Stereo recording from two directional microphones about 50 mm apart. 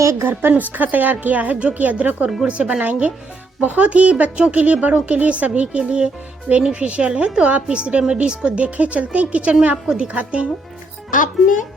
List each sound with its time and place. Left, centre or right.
0.0 s a woman's voice: right
0.3 s a woman's voice: right